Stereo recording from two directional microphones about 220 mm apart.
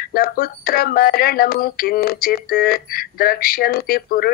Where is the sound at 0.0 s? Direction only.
40° left (ahead or behind).